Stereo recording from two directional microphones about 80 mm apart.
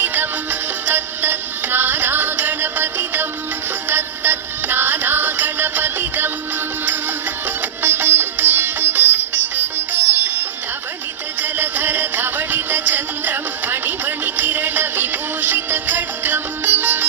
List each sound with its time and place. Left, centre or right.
0.0 s music: right
7.8 s sitar: right
11.4 s music: right